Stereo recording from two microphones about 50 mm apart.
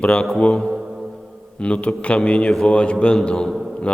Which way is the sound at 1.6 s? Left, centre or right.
Left.